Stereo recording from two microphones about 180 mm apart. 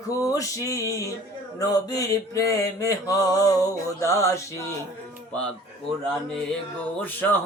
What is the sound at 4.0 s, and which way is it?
Speech, 15° left (ahead or behind).